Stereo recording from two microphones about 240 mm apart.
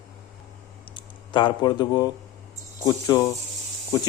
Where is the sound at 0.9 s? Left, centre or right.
Centre.